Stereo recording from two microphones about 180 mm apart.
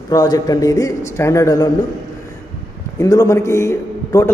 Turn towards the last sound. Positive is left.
turn(degrees=15)  # may be behind; listen again after turning